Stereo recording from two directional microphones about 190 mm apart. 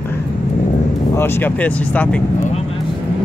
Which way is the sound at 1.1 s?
10° left (ahead or behind).